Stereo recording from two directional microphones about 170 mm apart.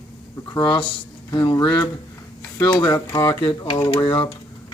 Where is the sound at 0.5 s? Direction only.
25° left (ahead or behind).